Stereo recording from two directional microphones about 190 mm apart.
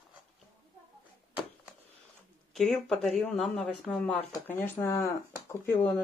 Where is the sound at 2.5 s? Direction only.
Centre (ahead or behind).